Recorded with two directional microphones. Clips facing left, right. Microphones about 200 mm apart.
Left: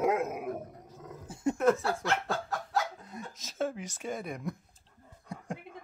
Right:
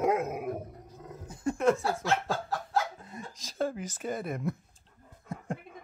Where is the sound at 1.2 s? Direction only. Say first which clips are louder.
Left 1 dB; 25° left (ahead or behind).